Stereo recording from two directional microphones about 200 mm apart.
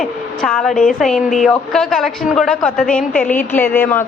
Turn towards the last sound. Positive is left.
turn(degrees=10)  # may be behind; listen again after turning